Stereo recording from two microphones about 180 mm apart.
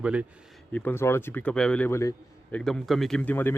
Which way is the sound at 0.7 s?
10° left (ahead or behind).